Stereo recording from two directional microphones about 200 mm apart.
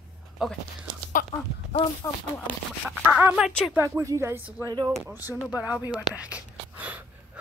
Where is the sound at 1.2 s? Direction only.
45° left (ahead or behind).